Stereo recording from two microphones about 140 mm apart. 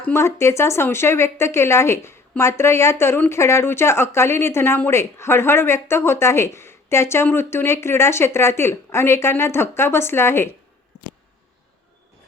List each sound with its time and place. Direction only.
0.0 s speech: 20° left (ahead or behind)